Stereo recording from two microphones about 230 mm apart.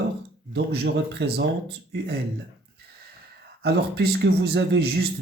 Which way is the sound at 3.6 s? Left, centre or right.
Right.